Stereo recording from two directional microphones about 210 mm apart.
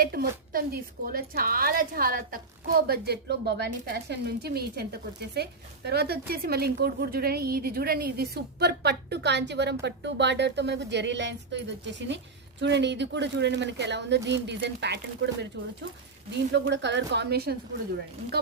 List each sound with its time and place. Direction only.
0.0 s a woman's voice: 45° right (ahead or behind)
16.5 s a woman's voice: 55° right (ahead or behind)